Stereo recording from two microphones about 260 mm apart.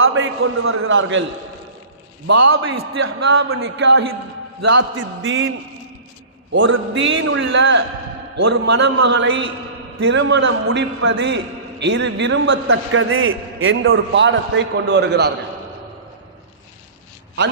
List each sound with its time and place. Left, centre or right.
0.0 s a man's voice: right
2.5 s a man's voice: right
6.5 s a man's voice: right